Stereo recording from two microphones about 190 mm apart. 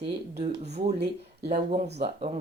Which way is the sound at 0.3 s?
35° right (ahead or behind).